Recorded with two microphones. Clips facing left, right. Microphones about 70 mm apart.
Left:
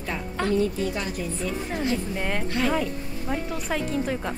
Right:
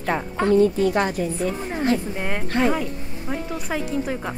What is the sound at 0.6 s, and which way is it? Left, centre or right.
Speech, right.